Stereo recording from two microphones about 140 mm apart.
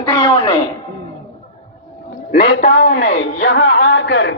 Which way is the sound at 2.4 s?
50° left (ahead or behind).